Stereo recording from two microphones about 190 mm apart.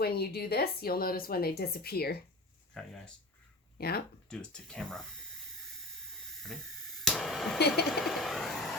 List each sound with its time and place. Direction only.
0.0 s a woman's voice: 55° left (ahead or behind)
2.8 s speech: centre (ahead or behind)
3.8 s speech: 55° left (ahead or behind)
4.3 s speech: 5° left (ahead or behind)
7.0 s a sound: centre (ahead or behind)
7.9 s bird: centre (ahead or behind)